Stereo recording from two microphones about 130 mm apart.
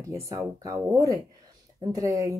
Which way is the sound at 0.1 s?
25° right (ahead or behind).